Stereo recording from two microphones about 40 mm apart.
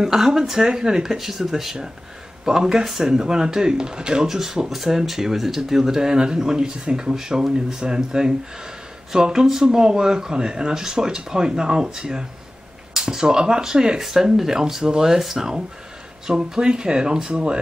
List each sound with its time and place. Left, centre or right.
0.0 s speech: centre